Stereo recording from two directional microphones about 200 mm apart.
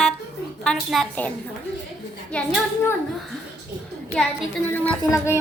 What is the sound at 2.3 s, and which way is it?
Speech, 5° left (ahead or behind).